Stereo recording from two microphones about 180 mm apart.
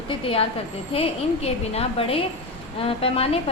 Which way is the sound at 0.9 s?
35° left (ahead or behind).